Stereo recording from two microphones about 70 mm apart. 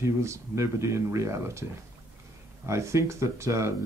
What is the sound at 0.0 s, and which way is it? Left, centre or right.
Speech, right.